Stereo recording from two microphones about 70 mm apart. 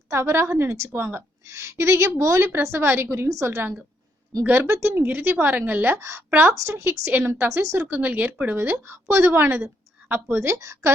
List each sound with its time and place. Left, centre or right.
0.1 s a woman's voice: right
1.5 s a woman's voice: right
6.0 s a woman's voice: right
7.1 s a woman's voice: right
7.8 s a woman's voice: right
10.4 s a woman's voice: right